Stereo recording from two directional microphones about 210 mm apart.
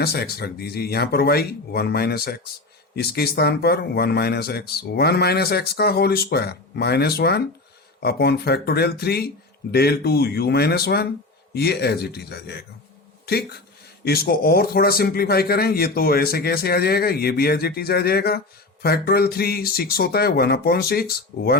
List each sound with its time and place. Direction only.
0.0 s a man's voice: 50° left (ahead or behind)